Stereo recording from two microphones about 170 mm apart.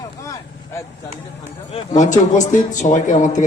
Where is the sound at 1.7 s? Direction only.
45° left (ahead or behind).